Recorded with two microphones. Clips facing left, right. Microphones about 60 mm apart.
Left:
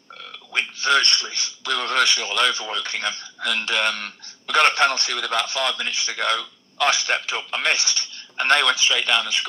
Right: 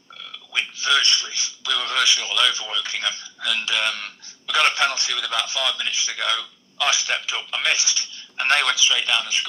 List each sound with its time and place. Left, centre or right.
0.2 s speech: left